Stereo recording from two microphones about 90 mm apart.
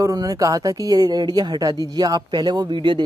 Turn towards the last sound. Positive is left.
turn(degrees=-60)  # may be behind; listen again after turning